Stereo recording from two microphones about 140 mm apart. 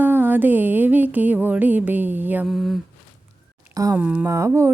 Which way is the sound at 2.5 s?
Centre (ahead or behind).